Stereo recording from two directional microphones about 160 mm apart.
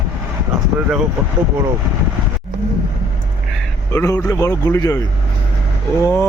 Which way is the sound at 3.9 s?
20° left (ahead or behind).